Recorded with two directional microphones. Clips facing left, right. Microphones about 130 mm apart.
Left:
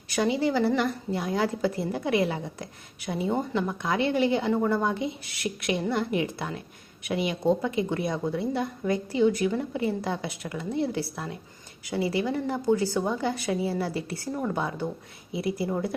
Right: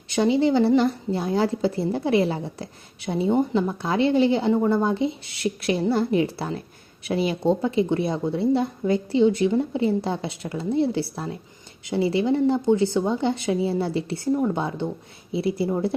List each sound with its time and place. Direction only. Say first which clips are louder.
0.1 s a woman's voice: right 5 dB; 25° right (ahead or behind)